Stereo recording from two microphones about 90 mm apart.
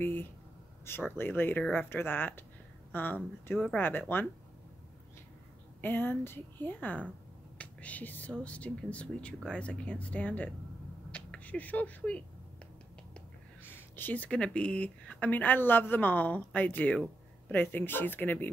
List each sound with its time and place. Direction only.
0.0 s speech: 25° left (ahead or behind)
5.8 s speech: 20° left (ahead or behind)
11.1 s a sound: 15° left (ahead or behind)
13.7 s speech: 25° left (ahead or behind)